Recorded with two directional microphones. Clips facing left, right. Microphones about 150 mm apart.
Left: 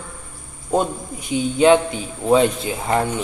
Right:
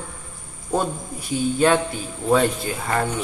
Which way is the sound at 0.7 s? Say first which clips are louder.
Left 3 dB; 15° left (ahead or behind).